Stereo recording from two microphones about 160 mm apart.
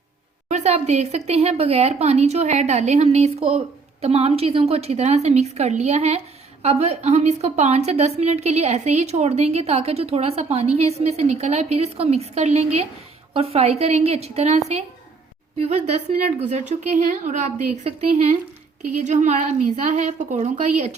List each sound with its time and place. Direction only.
0.4 s a woman's voice: 45° right (ahead or behind)
16.4 s speech: 45° right (ahead or behind)